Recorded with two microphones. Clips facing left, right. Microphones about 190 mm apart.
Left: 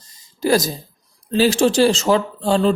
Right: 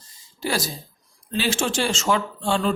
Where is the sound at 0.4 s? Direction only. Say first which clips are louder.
Left 9 dB; 40° left (ahead or behind).